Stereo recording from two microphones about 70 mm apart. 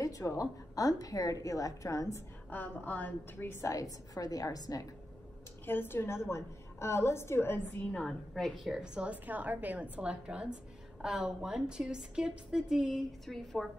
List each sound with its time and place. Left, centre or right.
0.0 s a woman's voice: left
2.5 s a woman's voice: left
3.6 s a woman's voice: left
5.7 s a woman's voice: left
7.9 s a woman's voice: centre
8.8 s a woman's voice: centre